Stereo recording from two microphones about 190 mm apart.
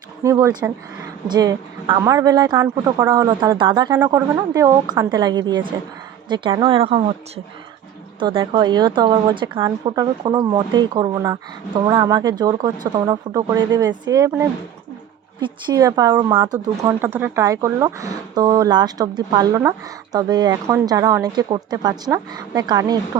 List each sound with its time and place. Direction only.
0.2 s speech: 15° right (ahead or behind)
8.2 s speech: 25° right (ahead or behind)
17.0 s speech: 10° right (ahead or behind)